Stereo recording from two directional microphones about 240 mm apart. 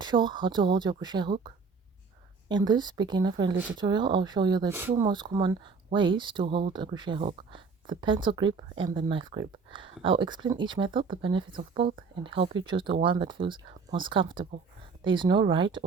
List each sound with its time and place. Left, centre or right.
0.0 s speech: centre